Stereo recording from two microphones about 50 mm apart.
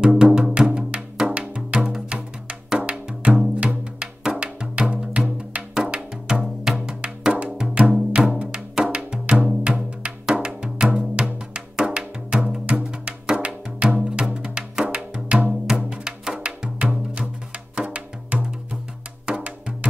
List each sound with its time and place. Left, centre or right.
0.1 s music: centre